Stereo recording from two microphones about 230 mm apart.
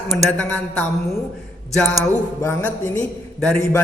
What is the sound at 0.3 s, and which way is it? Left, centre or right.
Speech, centre.